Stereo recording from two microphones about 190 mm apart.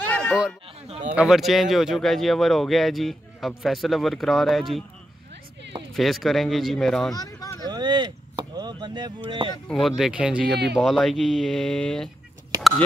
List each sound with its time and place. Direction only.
0.1 s a sound: 5° left (ahead or behind)
1.1 s speech: centre (ahead or behind)
5.9 s speech: centre (ahead or behind)
7.2 s a sound: 20° left (ahead or behind)
7.6 s chop: 20° right (ahead or behind)
9.7 s speech: centre (ahead or behind)